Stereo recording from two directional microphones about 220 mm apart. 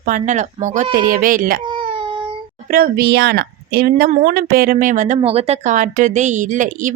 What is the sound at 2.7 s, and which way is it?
Speech, 45° right (ahead or behind).